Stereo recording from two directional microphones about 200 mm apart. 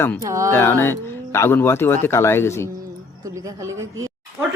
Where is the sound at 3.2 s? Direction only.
15° right (ahead or behind).